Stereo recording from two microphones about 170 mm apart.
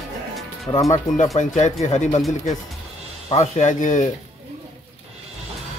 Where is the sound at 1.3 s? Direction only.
45° left (ahead or behind).